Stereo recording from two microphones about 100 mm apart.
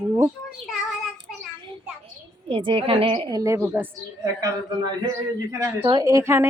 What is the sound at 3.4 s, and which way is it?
Speech, 25° right (ahead or behind).